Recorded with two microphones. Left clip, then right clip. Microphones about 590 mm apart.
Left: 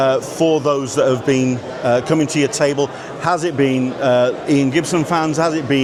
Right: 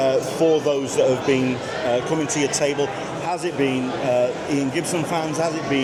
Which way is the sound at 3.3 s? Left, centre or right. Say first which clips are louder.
Left 7 dB; left.